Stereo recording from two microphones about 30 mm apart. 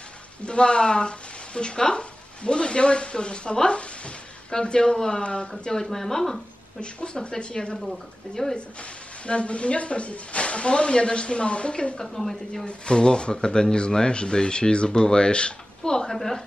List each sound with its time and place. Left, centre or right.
0.4 s a woman's voice: left
4.5 s speech: left
5.2 s speech: left
5.9 s speech: centre
7.2 s speech: left
8.4 s speech: centre
9.2 s speech: left
12.0 s speech: centre
12.6 s speech: left
15.8 s a sound: left